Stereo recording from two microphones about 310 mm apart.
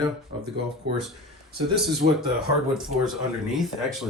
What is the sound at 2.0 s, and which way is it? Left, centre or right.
Speech, right.